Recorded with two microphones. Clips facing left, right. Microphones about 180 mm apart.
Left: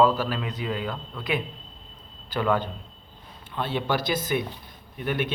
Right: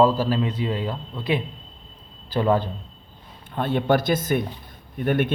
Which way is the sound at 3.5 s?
50° right (ahead or behind).